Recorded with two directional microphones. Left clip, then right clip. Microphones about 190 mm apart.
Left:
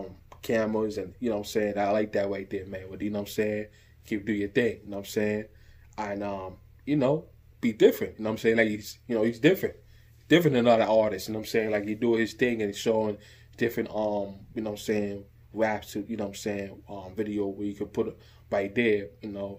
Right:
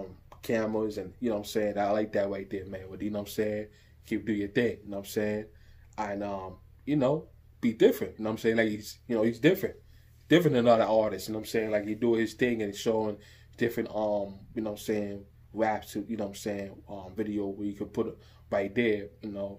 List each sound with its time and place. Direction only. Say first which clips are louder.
0.0 s speech: left 2 dB; 25° left (ahead or behind)